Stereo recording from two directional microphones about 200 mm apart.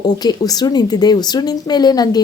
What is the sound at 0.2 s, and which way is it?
A woman's voice, 20° left (ahead or behind).